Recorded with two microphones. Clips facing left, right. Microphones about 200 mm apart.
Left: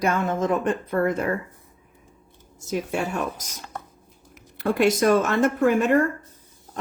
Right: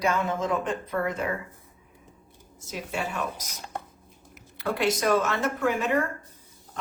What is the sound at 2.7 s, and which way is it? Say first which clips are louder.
Speech: left 6 dB; 50° left (ahead or behind).